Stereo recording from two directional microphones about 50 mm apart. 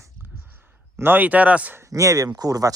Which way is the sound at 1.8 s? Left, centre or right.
Right.